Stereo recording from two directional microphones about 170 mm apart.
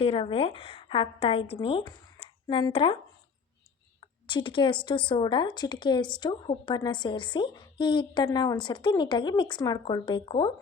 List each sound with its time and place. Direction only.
0.0 s a woman's voice: 35° left (ahead or behind)
4.0 s a woman's voice: 30° left (ahead or behind)